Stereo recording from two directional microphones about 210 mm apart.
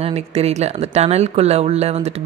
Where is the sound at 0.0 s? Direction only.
30° right (ahead or behind).